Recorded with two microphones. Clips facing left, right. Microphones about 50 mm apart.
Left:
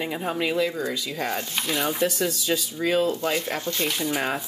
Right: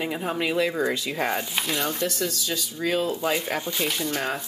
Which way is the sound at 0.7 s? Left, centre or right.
Right.